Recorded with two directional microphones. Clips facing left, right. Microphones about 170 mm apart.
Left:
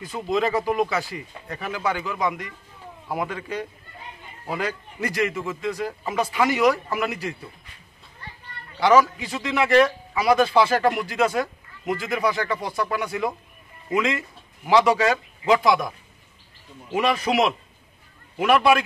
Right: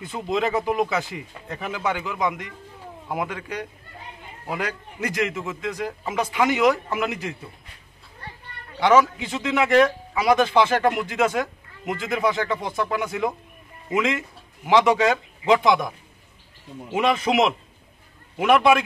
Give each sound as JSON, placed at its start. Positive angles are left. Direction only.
{"t": 0.0, "sound": "a man's voice", "side_deg": -20}
{"t": 8.8, "sound": "speech", "side_deg": -20}
{"t": 16.9, "sound": "speech", "side_deg": -20}